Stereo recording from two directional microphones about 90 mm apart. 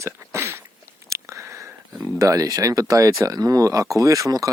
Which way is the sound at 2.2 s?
35° right (ahead or behind).